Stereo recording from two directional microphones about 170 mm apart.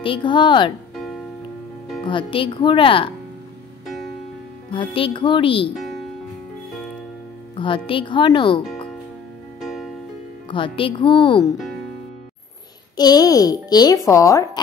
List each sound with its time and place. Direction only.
0.0 s speech: 30° left (ahead or behind)
2.0 s speech: 30° left (ahead or behind)
3.8 s music: centre (ahead or behind)
4.6 s speech: 30° left (ahead or behind)
7.5 s speech: 30° left (ahead or behind)
9.6 s music: centre (ahead or behind)
10.5 s speech: 30° left (ahead or behind)
12.9 s speech: 25° left (ahead or behind)